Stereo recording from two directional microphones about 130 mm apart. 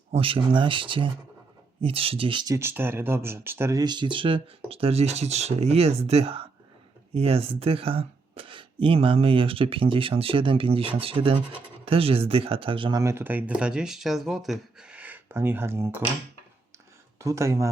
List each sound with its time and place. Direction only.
0.1 s speech: 45° right (ahead or behind)
2.6 s speech: 15° right (ahead or behind); by 13.0 s 40° right (ahead or behind)
13.0 s speech: 20° right (ahead or behind)
17.2 s speech: 20° right (ahead or behind)